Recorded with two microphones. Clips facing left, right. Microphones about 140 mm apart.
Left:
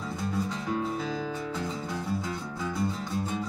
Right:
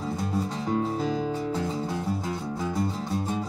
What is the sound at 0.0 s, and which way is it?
Music, 35° right (ahead or behind).